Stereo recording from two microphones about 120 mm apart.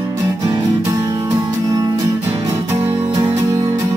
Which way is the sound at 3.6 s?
35° right (ahead or behind).